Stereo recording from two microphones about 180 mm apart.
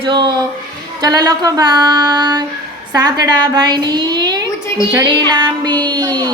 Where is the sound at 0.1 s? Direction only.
25° right (ahead or behind).